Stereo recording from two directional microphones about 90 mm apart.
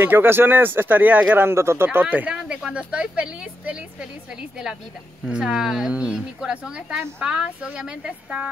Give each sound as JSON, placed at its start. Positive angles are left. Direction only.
{"t": 0.0, "sound": "a woman's voice", "side_deg": -25}